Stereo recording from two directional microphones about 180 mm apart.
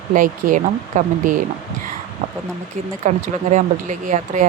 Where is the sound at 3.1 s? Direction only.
45° right (ahead or behind).